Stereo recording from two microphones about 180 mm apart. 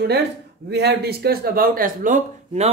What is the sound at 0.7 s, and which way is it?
Speech, 65° right (ahead or behind).